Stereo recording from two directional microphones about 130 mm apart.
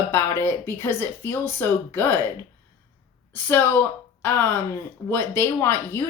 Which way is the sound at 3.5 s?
15° left (ahead or behind).